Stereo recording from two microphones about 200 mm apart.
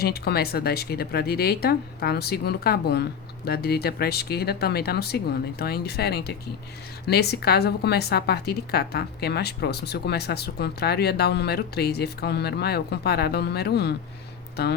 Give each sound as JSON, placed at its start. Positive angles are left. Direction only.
{"t": 0.0, "sound": "a woman's voice", "side_deg": 50}